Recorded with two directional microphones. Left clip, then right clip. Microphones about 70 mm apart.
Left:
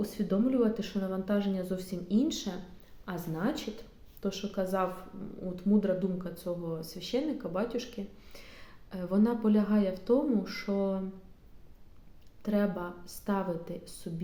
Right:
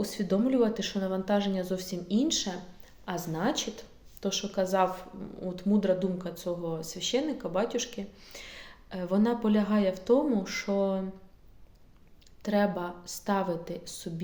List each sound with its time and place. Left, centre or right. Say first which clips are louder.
0.2 s speech: right 2 dB; centre
0.5 s a woman's voice: right 3 dB; left
12.4 s a woman's voice: right 4 dB; left